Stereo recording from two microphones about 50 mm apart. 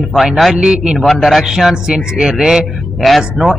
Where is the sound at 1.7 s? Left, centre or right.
Centre.